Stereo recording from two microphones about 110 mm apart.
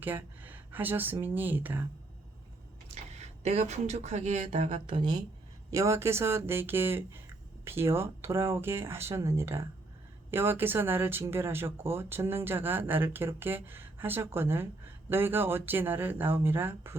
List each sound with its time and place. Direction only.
0.0 s speech: 15° right (ahead or behind)
2.9 s speech: 90° right
4.9 s speech: 45° right (ahead or behind)
5.7 s speech: 25° right (ahead or behind)